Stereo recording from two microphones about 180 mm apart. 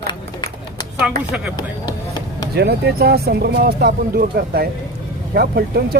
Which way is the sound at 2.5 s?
65° right (ahead or behind).